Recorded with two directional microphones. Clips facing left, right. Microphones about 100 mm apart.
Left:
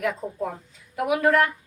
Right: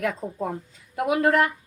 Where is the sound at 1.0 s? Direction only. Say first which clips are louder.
Even; 30° right (ahead or behind).